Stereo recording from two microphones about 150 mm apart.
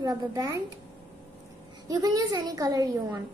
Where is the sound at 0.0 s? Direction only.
25° right (ahead or behind).